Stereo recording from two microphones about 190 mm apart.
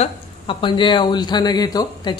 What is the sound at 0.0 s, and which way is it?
Speech, 25° left (ahead or behind).